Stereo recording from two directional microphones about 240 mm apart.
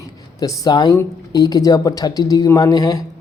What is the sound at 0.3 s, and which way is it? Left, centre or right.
Speech, centre.